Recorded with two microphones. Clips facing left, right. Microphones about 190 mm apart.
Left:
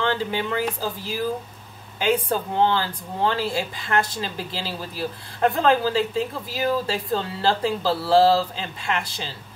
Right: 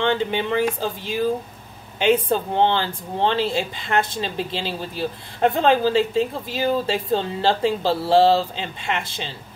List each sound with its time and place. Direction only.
0.0 s speech: 20° right (ahead or behind)